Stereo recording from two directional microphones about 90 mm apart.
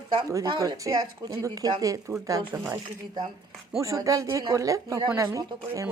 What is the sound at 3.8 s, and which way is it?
Speech, 40° right (ahead or behind).